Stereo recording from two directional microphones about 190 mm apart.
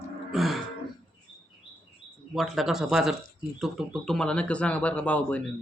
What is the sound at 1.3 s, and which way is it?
Chirp, 25° left (ahead or behind).